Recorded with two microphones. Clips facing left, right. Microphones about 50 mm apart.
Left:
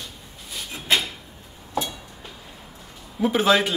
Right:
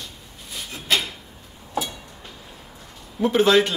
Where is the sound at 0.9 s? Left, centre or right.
Centre.